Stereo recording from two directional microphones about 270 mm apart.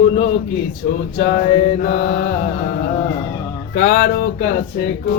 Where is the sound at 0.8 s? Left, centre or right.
Left.